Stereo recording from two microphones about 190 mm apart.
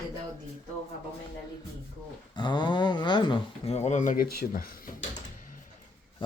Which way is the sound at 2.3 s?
25° left (ahead or behind).